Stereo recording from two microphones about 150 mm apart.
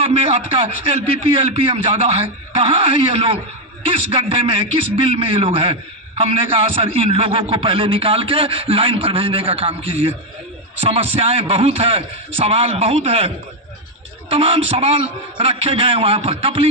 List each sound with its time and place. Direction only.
0.0 s a man's voice: 40° right (ahead or behind)